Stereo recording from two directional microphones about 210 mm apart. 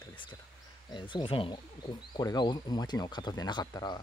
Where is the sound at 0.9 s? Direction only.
20° left (ahead or behind).